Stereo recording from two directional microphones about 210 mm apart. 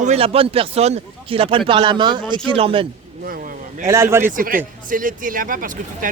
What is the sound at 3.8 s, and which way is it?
Speech, 15° right (ahead or behind).